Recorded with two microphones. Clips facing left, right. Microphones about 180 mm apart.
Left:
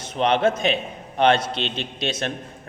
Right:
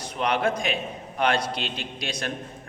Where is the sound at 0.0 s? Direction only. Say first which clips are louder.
Left 5 dB; 25° left (ahead or behind).